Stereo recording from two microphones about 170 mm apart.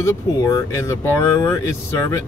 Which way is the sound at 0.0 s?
20° left (ahead or behind).